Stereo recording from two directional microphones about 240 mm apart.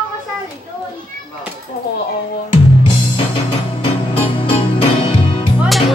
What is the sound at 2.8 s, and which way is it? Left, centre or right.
Music, left.